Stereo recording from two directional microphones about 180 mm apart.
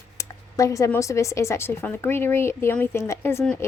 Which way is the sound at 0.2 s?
20° left (ahead or behind).